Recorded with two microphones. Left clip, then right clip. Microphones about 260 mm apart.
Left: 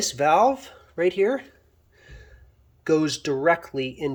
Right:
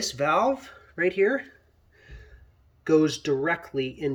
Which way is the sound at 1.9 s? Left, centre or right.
Centre.